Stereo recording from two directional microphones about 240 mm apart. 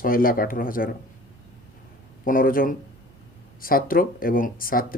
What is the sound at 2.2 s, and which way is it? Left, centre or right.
Speech, left.